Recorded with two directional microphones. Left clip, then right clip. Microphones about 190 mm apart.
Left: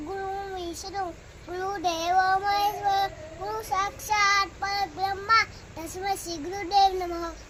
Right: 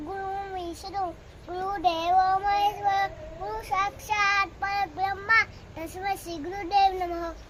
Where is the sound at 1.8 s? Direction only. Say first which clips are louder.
Right 1 dB; 5° right (ahead or behind).